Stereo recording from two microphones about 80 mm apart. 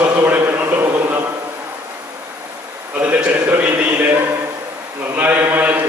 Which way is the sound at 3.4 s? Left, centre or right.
Right.